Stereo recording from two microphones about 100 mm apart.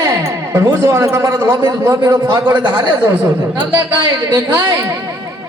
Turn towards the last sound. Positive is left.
turn(degrees=-40)  # may be behind; listen again after turning